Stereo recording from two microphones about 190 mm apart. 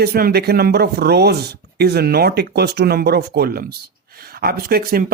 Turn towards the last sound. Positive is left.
turn(degrees=-50)  # may be behind; listen again after turning